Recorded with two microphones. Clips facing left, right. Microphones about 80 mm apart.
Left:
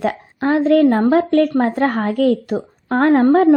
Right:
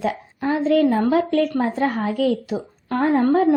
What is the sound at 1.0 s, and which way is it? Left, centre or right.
A woman's voice, left.